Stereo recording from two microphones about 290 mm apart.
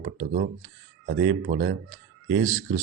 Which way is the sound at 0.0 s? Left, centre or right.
Right.